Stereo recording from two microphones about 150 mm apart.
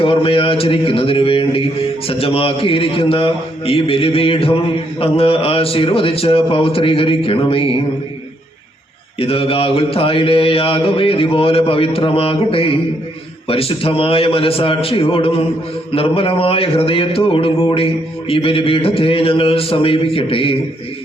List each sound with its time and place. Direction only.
0.0 s speech: 40° left (ahead or behind)
9.1 s speech: 40° left (ahead or behind)